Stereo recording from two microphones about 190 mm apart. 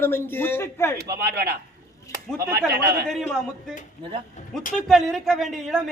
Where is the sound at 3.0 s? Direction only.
Centre (ahead or behind).